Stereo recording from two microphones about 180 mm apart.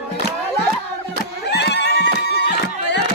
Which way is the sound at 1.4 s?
70° left (ahead or behind).